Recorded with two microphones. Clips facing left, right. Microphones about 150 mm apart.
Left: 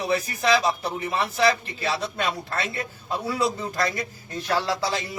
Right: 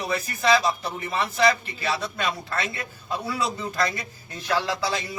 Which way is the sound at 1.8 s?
30° left (ahead or behind).